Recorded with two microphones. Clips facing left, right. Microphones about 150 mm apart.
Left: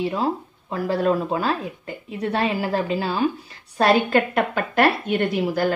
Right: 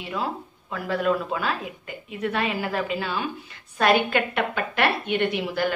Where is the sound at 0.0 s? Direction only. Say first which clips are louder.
Left 6 dB; 35° left (ahead or behind).